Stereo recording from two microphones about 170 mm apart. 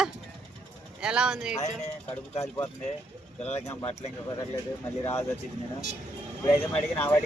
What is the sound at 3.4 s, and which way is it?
Speech, 40° left (ahead or behind).